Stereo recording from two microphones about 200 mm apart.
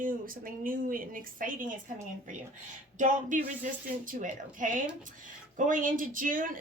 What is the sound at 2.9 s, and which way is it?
A woman's voice, 40° right (ahead or behind).